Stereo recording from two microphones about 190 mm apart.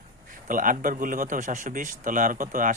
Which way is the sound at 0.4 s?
45° right (ahead or behind).